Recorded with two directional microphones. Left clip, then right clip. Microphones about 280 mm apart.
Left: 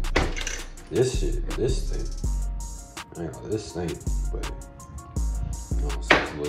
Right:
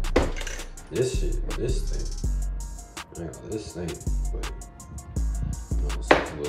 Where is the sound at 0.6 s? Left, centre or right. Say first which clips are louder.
Left 3 dB; centre.